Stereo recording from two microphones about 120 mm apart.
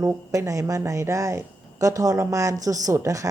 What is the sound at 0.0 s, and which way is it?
A woman's voice, 25° right (ahead or behind).